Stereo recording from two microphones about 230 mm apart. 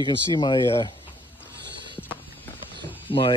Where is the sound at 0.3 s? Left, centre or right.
Centre.